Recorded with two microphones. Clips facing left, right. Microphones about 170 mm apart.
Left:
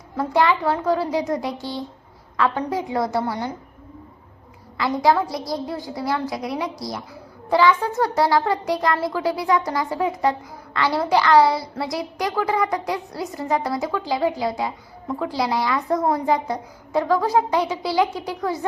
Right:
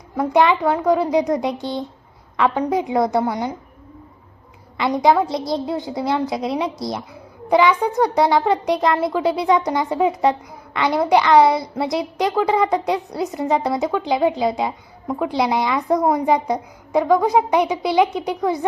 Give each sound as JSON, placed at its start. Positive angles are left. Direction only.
{"t": 0.2, "sound": "a woman's voice", "side_deg": -20}
{"t": 4.8, "sound": "a woman's voice", "side_deg": -20}